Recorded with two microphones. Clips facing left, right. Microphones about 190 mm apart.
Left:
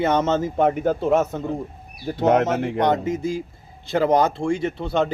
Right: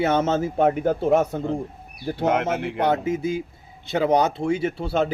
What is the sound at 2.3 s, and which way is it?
Speech, 40° left (ahead or behind).